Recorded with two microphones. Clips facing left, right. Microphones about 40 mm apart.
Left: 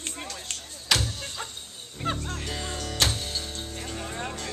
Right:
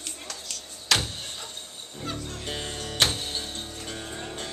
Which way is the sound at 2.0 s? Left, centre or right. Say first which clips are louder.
Left 4 dB; left.